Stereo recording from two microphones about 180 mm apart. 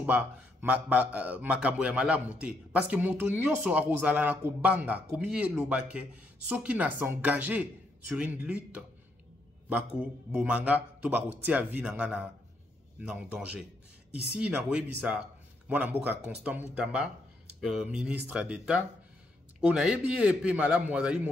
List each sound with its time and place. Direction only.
0.0 s a man's voice: 10° right (ahead or behind)